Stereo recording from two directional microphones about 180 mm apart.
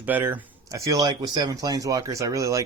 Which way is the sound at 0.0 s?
10° right (ahead or behind).